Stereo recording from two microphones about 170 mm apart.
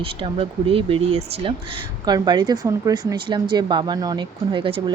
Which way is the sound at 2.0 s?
25° right (ahead or behind).